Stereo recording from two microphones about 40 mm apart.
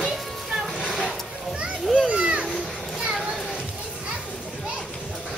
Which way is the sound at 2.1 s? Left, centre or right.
Right.